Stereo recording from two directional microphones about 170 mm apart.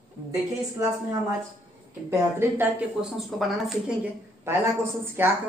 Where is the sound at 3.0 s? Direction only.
Centre (ahead or behind).